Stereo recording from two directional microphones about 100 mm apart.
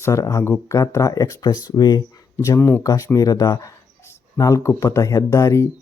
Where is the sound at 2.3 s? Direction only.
30° left (ahead or behind).